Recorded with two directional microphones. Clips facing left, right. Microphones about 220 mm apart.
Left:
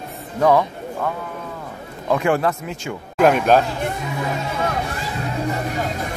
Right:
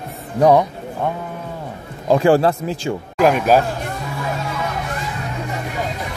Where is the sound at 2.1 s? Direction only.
30° right (ahead or behind).